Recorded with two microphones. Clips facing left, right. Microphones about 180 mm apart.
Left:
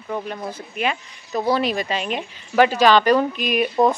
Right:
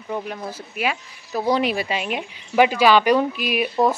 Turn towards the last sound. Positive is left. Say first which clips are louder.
# left 2 dB
turn(degrees=-5)  # may be behind; listen again after turning